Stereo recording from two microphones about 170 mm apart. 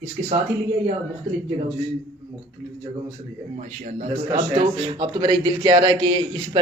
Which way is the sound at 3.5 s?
45° right (ahead or behind).